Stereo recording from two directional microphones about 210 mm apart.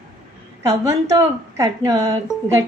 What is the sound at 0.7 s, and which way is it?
A woman's voice, 15° right (ahead or behind).